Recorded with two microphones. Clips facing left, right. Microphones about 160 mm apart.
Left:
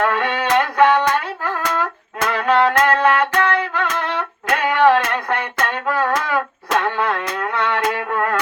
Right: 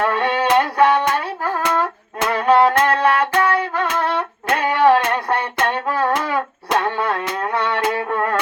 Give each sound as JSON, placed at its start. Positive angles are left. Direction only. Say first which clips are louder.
{"t": 0.0, "sound": "music", "louder": "right 1 dB", "side_deg": -35}
{"t": 1.5, "sound": "humming", "louder": "right 4 dB", "side_deg": -35}
{"t": 2.6, "sound": "a sound", "louder": "even", "side_deg": -30}